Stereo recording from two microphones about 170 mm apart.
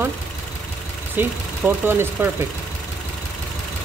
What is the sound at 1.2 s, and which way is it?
Speech, 10° right (ahead or behind).